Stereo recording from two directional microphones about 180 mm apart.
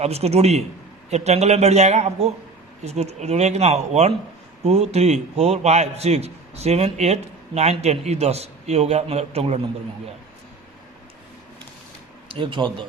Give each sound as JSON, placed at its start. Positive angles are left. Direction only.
{"t": 0.0, "sound": "a man's voice", "side_deg": -35}
{"t": 12.3, "sound": "speech", "side_deg": -30}